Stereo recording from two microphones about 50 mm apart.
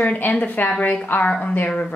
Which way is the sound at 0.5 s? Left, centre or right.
Left.